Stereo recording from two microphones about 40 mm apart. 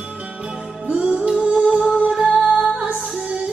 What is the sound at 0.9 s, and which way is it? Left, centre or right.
Music, right.